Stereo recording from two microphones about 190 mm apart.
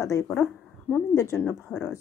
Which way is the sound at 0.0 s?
15° left (ahead or behind).